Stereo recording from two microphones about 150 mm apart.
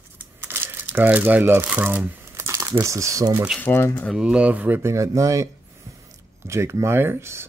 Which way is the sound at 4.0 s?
5° right (ahead or behind).